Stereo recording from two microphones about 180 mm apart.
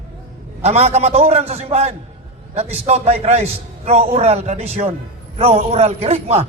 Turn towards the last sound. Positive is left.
turn(degrees=-35)  # may be behind; listen again after turning